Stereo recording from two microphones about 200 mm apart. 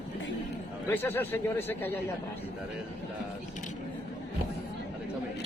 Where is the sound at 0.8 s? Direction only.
10° left (ahead or behind).